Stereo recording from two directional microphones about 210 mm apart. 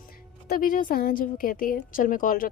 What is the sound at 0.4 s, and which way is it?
Speech, 45° left (ahead or behind).